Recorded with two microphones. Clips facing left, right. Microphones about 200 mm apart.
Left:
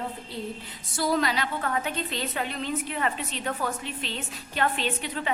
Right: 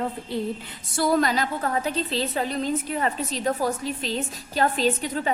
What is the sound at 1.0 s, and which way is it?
A woman's voice, 50° right (ahead or behind).